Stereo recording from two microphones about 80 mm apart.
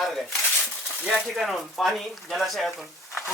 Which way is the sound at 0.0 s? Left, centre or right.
Centre.